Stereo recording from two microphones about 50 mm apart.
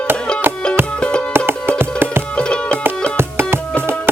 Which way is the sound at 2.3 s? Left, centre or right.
Centre.